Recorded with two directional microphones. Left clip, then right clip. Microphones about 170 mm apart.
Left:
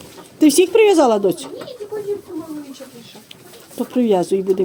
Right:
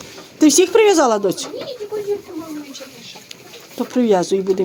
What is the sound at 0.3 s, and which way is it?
Speech, 15° left (ahead or behind).